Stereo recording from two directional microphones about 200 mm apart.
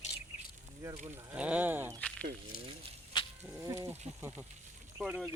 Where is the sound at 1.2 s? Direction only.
10° right (ahead or behind).